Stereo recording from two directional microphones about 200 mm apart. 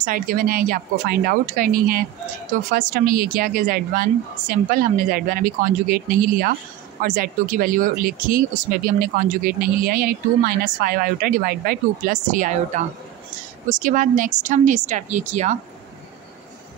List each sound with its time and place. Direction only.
0.0 s speech: 45° right (ahead or behind)